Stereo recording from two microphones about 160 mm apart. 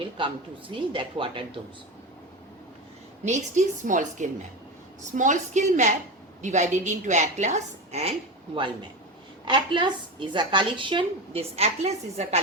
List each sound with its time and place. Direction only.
0.9 s a woman's voice: 30° right (ahead or behind)
3.2 s a woman's voice: 50° right (ahead or behind)
8.5 s a woman's voice: 30° right (ahead or behind)